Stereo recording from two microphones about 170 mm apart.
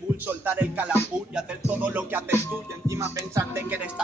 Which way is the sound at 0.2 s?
10° right (ahead or behind).